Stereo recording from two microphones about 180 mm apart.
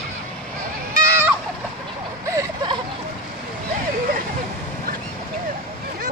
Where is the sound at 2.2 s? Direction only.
20° right (ahead or behind).